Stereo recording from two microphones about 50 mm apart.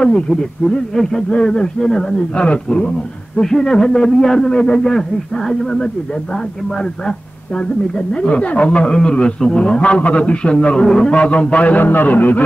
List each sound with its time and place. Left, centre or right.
0.3 s a man's voice: centre
2.3 s a man's voice: left
3.3 s a man's voice: centre
9.8 s a man's voice: left